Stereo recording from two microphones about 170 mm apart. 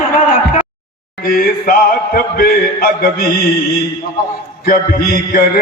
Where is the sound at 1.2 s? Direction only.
55° left (ahead or behind).